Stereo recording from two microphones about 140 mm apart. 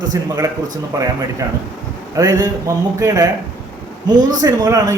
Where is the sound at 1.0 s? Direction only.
25° right (ahead or behind).